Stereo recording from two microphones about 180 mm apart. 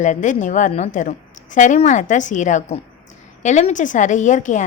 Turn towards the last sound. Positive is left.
turn(degrees=45)  # may be behind; listen again after turning